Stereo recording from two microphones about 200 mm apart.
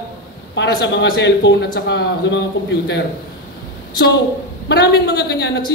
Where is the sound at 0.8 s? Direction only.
60° left (ahead or behind).